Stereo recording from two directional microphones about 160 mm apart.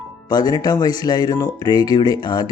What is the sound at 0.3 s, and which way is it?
Speech, 25° left (ahead or behind).